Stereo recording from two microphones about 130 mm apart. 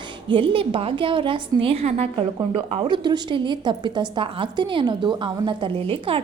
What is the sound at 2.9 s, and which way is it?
A woman's voice, 35° right (ahead or behind).